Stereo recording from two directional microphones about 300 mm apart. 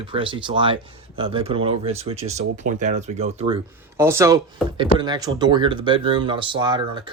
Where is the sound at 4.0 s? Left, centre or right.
Centre.